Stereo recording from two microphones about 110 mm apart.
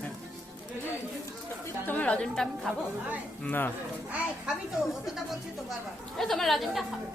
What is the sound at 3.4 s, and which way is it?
Speech, 20° left (ahead or behind).